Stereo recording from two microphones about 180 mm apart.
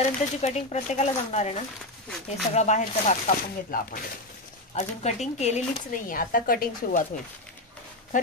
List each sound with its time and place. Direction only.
0.4 s speech: 40° left (ahead or behind)
2.0 s a sound: centre (ahead or behind)
2.5 s speech: 40° left (ahead or behind)